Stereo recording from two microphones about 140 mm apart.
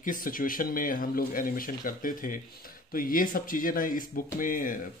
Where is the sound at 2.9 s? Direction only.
90° left.